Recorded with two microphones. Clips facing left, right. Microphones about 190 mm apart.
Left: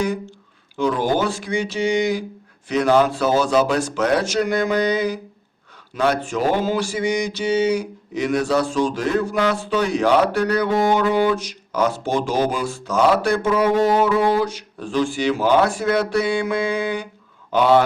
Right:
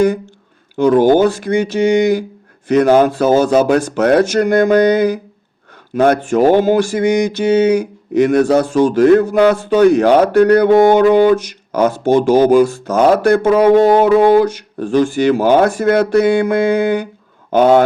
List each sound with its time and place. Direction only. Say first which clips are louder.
0.8 s speech: right 10 dB; 55° right (ahead or behind)
17.5 s speech: right 6 dB; 45° right (ahead or behind)